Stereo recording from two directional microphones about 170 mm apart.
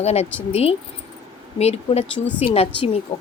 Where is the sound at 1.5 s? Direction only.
40° left (ahead or behind).